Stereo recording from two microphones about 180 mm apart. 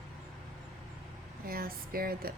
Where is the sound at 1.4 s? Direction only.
55° right (ahead or behind).